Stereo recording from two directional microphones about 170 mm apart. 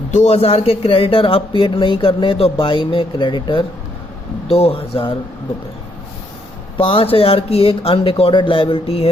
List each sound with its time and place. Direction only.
0.1 s speech: 40° left (ahead or behind)
6.7 s speech: 30° left (ahead or behind)